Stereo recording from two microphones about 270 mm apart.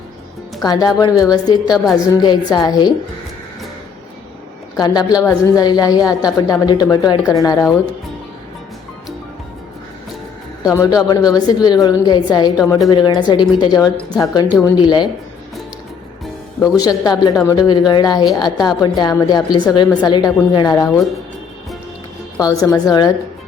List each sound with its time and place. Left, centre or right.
0.6 s a woman's voice: centre
4.8 s a woman's voice: centre
10.6 s a woman's voice: centre
13.9 s a woman's voice: centre
16.6 s a woman's voice: centre
22.4 s a woman's voice: centre